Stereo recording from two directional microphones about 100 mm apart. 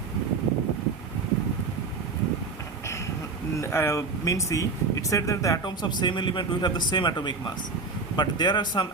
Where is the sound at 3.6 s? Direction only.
25° left (ahead or behind).